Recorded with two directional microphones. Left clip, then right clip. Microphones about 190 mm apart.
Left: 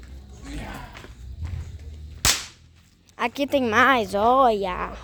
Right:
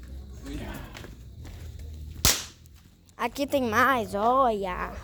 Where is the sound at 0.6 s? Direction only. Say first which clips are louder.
Left 6 dB; 30° left (ahead or behind).